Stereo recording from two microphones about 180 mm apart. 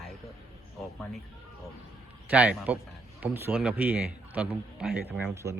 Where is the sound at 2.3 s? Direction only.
10° right (ahead or behind).